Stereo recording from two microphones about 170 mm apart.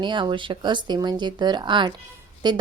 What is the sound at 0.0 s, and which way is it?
A woman's voice, 25° right (ahead or behind).